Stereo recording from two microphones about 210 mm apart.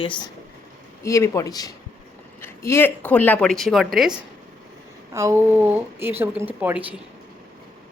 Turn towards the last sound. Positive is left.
turn(degrees=-5)  # may be behind; listen again after turning